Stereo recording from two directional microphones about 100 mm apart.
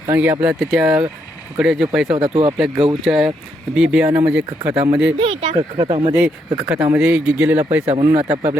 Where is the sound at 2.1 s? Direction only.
65° right (ahead or behind).